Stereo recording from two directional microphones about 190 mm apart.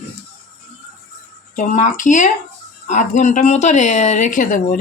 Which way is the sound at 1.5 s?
40° left (ahead or behind).